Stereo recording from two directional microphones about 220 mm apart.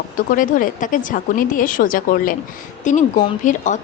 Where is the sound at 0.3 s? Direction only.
35° left (ahead or behind).